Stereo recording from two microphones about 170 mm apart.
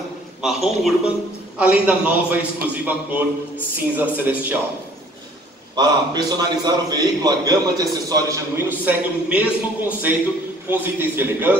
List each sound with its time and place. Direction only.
0.4 s a man's voice: centre (ahead or behind)
5.8 s a man's voice: 25° right (ahead or behind)